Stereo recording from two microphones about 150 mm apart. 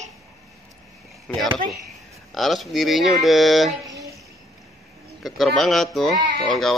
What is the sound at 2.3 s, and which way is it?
Speech, centre (ahead or behind).